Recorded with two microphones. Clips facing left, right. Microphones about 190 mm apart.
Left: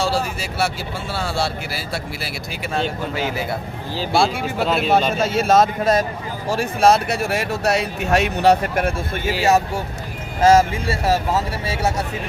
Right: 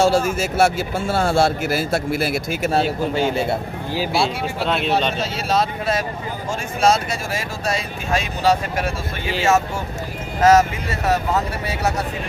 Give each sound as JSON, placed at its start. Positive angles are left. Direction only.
{"t": 0.0, "sound": "speech", "side_deg": -50}
{"t": 3.2, "sound": "a man's voice", "side_deg": -30}
{"t": 3.9, "sound": "speech", "side_deg": -5}
{"t": 5.1, "sound": "speech", "side_deg": 50}
{"t": 6.6, "sound": "speech", "side_deg": 60}
{"t": 10.4, "sound": "speech", "side_deg": 30}